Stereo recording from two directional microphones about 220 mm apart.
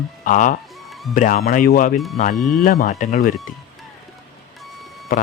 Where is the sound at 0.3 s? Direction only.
35° left (ahead or behind).